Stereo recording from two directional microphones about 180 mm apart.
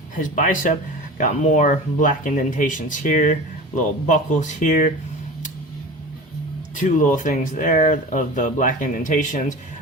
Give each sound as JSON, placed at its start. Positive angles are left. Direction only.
{"t": 0.2, "sound": "speech", "side_deg": 45}
{"t": 6.7, "sound": "speech", "side_deg": 45}